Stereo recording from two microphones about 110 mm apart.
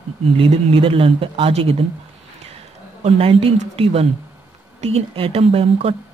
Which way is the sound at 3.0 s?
75° right (ahead or behind).